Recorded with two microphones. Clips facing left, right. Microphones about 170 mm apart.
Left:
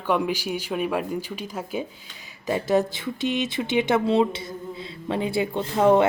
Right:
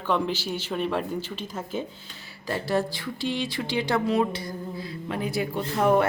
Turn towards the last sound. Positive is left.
turn(degrees=25)  # may be behind; listen again after turning